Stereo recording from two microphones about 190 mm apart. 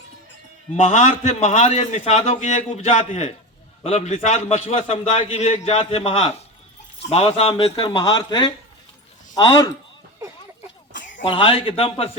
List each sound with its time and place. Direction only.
0.8 s a man's voice: 35° left (ahead or behind); by 9.6 s 20° left (ahead or behind)
10.9 s a sound: 75° left (ahead or behind)
11.3 s a man's voice: 25° left (ahead or behind)